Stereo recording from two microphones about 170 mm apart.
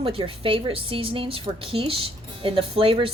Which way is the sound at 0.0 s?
30° right (ahead or behind).